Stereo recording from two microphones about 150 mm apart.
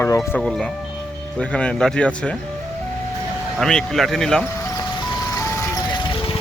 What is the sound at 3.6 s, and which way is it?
Speech, 5° left (ahead or behind).